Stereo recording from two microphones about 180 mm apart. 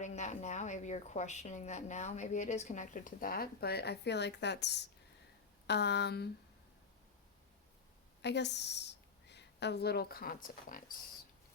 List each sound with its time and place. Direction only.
0.0 s a woman's voice: 40° left (ahead or behind); by 6.3 s 65° left (ahead or behind)
8.2 s a woman's voice: 70° left (ahead or behind); by 10.9 s 50° left (ahead or behind)